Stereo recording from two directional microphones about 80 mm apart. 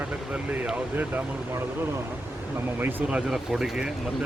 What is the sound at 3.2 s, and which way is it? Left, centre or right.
Speech, centre.